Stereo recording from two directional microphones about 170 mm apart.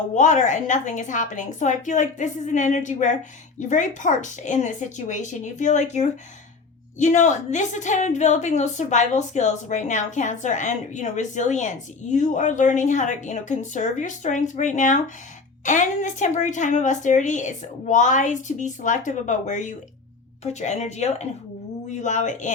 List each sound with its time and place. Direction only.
0.1 s a woman's voice: 45° left (ahead or behind)